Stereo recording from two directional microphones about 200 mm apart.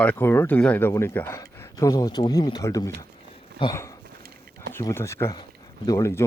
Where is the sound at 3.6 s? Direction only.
15° left (ahead or behind).